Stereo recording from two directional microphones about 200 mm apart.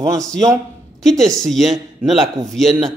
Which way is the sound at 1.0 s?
Centre (ahead or behind).